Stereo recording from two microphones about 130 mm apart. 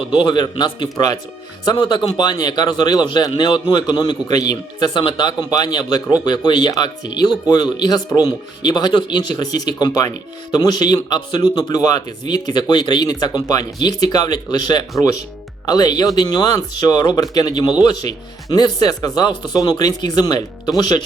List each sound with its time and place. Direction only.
0.1 s a man's voice: 35° left (ahead or behind)